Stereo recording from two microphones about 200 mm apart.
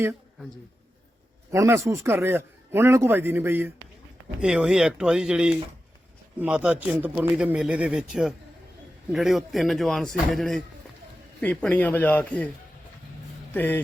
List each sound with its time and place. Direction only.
1.5 s a man's voice: 15° right (ahead or behind); by 12.5 s 5° left (ahead or behind)
13.5 s a man's voice: 10° left (ahead or behind)